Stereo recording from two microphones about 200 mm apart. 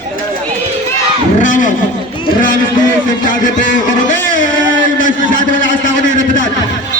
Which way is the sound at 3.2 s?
40° left (ahead or behind).